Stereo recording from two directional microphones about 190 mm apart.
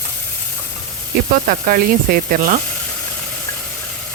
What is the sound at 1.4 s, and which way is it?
Sizzle, 50° right (ahead or behind).